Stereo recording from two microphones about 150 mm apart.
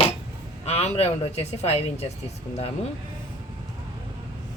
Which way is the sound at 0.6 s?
45° left (ahead or behind).